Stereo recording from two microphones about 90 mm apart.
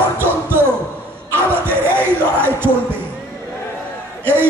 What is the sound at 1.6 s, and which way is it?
Music, 25° right (ahead or behind).